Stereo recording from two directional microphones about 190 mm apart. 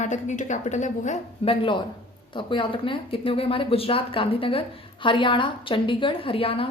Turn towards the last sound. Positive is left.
turn(degrees=30)  # may be behind; listen again after turning